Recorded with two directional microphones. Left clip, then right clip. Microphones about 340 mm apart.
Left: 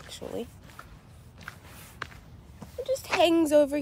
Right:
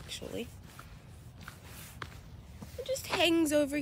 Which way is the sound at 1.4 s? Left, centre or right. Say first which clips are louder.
Left 5 dB; left.